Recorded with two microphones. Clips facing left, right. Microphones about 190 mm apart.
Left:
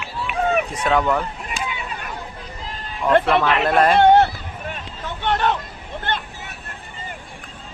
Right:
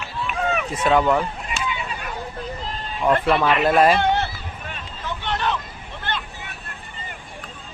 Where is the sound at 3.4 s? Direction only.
5° right (ahead or behind).